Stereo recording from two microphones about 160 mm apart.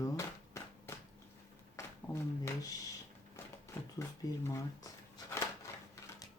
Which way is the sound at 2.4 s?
20° left (ahead or behind).